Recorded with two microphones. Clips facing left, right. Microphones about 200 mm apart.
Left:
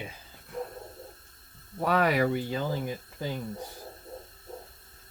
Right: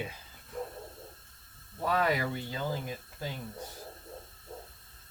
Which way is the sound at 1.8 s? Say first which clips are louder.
Left 5 dB; 70° left (ahead or behind).